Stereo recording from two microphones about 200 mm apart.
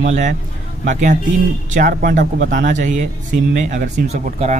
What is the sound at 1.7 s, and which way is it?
Speech, 45° right (ahead or behind).